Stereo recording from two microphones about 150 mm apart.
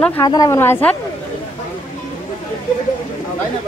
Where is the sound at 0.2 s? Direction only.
25° left (ahead or behind).